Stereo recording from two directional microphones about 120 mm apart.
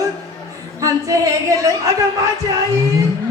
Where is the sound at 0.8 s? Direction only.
30° right (ahead or behind).